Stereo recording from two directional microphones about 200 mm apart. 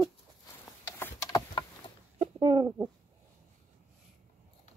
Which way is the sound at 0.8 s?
10° left (ahead or behind).